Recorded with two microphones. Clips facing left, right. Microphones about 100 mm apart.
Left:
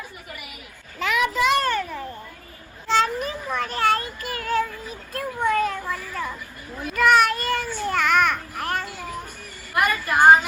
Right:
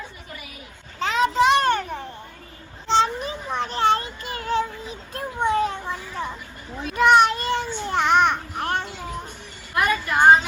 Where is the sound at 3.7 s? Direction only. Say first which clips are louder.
Right 2 dB; 25° right (ahead or behind).